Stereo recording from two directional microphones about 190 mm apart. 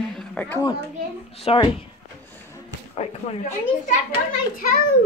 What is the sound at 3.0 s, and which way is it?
Speech, 35° left (ahead or behind).